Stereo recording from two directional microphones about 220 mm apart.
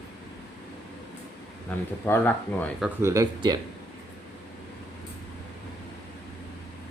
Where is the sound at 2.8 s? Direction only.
15° right (ahead or behind).